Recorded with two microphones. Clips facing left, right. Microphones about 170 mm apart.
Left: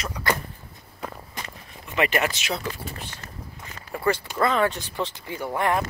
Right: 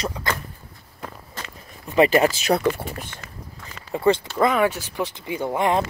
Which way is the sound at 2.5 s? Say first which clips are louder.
Right 10 dB; 60° right (ahead or behind).